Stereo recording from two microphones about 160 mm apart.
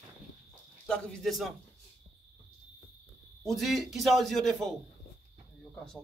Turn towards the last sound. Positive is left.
turn(degrees=5)  # may be behind; listen again after turning